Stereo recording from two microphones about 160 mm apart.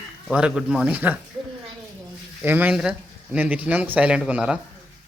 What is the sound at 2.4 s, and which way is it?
Speech, 10° right (ahead or behind).